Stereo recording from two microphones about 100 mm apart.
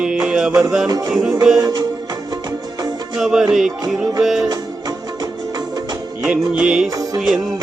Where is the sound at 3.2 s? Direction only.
5° right (ahead or behind).